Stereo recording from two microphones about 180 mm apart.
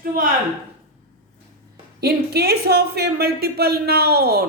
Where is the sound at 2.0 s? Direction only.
60° right (ahead or behind).